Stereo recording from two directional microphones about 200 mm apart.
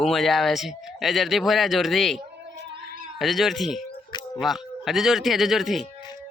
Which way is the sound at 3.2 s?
Centre (ahead or behind).